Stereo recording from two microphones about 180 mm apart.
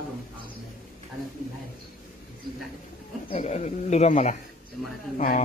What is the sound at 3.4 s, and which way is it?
Speech, 40° left (ahead or behind).